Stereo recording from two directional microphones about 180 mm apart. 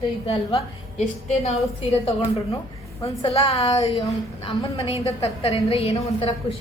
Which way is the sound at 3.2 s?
30° left (ahead or behind).